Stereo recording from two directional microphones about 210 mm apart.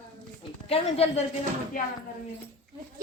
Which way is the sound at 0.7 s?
30° left (ahead or behind).